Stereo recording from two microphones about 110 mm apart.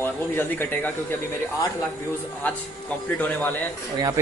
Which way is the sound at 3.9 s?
30° right (ahead or behind).